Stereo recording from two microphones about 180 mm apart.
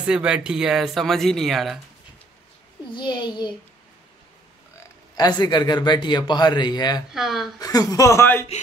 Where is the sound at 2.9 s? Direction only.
25° left (ahead or behind).